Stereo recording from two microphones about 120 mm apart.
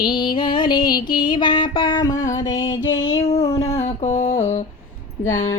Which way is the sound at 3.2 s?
60° left (ahead or behind).